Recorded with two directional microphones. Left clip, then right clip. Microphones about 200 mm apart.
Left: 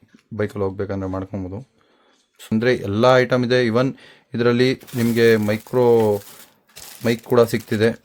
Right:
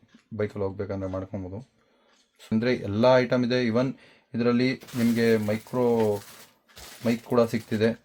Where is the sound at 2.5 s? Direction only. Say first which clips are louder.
Left 7 dB; 35° left (ahead or behind).